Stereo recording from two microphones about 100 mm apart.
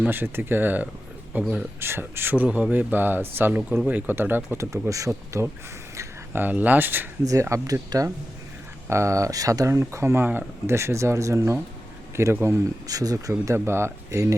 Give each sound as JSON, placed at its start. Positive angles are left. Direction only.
{"t": 0.0, "sound": "speech", "side_deg": -20}
{"t": 6.0, "sound": "speech", "side_deg": -20}
{"t": 7.3, "sound": "speech", "side_deg": -30}